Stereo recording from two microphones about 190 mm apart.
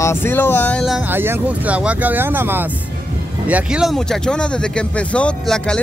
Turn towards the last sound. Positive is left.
turn(degrees=5)  # may be behind; listen again after turning